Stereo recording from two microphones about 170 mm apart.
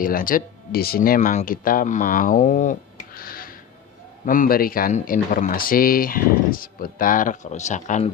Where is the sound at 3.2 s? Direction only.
60° left (ahead or behind).